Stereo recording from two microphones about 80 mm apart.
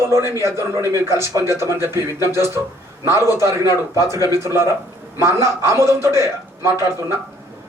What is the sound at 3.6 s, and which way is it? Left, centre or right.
Speech, left.